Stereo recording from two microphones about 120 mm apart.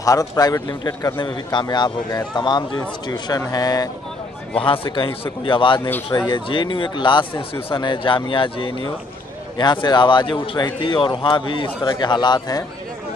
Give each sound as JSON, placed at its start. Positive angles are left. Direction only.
{"t": 0.0, "sound": "a man's voice", "side_deg": 30}
{"t": 4.6, "sound": "a man's voice", "side_deg": 45}